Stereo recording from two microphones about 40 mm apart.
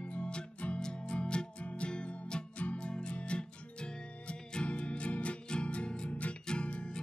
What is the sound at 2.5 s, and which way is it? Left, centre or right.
Music, left.